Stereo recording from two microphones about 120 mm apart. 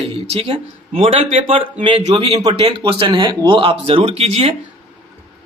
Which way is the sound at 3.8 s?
55° right (ahead or behind).